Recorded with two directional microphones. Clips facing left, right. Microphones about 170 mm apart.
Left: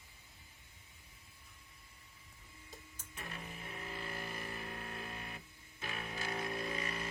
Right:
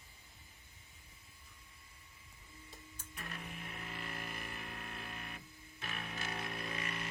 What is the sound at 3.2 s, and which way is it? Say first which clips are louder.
Music: even; 25° left (ahead or behind).